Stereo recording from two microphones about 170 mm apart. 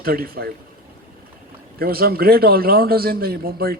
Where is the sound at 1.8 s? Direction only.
65° right (ahead or behind).